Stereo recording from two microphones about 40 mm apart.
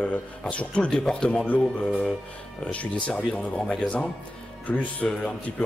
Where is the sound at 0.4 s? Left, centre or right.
Left.